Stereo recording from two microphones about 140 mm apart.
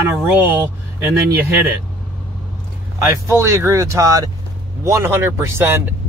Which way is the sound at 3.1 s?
20° right (ahead or behind).